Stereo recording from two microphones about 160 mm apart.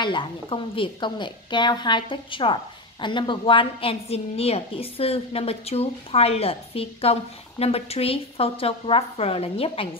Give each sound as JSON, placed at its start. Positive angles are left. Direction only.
{"t": 0.0, "sound": "a woman's voice", "side_deg": 30}